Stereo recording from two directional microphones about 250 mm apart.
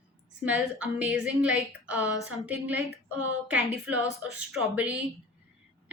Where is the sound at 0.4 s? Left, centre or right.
Centre.